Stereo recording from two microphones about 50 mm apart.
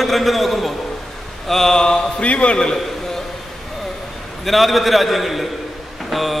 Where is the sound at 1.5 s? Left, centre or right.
Centre.